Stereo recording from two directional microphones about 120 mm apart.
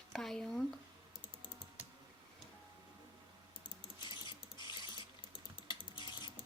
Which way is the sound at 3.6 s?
45° left (ahead or behind).